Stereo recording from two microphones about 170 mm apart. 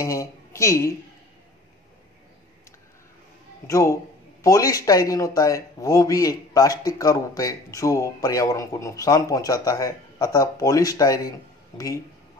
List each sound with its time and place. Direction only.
0.0 s a woman's voice: 20° left (ahead or behind)
3.6 s speech: 20° left (ahead or behind)